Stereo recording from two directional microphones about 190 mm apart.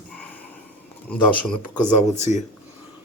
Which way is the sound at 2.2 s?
35° left (ahead or behind).